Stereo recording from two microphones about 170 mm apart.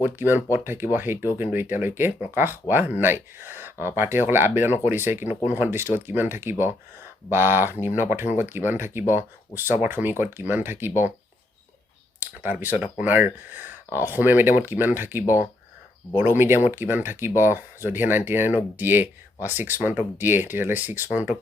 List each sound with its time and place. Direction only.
0.0 s speech: 10° right (ahead or behind)
12.2 s speech: 10° right (ahead or behind)